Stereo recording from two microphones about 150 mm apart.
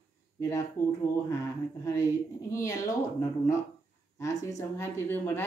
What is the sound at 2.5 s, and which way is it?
Speech, 20° left (ahead or behind).